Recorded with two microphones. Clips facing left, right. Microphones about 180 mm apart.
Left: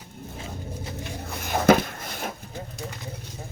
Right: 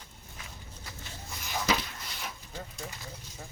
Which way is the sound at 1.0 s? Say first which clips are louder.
Left 10 dB; 65° left (ahead or behind).